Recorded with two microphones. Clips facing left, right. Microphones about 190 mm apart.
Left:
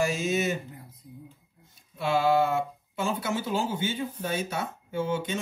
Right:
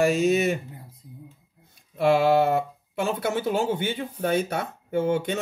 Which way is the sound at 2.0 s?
55° right (ahead or behind).